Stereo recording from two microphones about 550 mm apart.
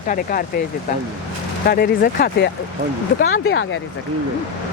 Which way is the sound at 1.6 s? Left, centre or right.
Centre.